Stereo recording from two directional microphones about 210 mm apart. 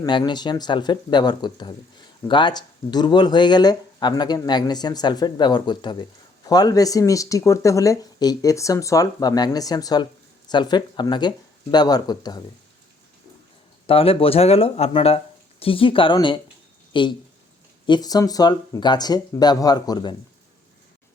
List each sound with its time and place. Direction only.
0.0 s speech: 20° left (ahead or behind)
13.8 s speech: 25° left (ahead or behind)